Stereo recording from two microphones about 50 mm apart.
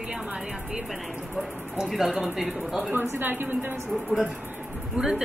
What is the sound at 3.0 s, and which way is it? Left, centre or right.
Speech, right.